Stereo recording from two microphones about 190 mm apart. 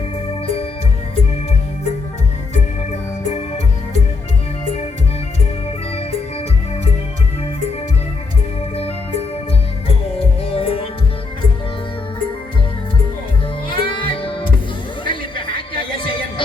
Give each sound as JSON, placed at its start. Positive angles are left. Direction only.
{"t": 0.4, "sound": "music", "side_deg": 30}
{"t": 8.7, "sound": "music", "side_deg": 30}
{"t": 10.5, "sound": "music", "side_deg": 30}
{"t": 13.7, "sound": "music", "side_deg": 25}